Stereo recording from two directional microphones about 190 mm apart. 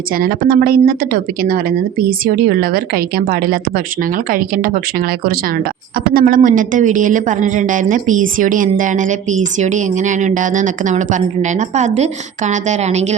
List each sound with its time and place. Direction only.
0.2 s speech: 50° right (ahead or behind); by 13.1 s 35° right (ahead or behind)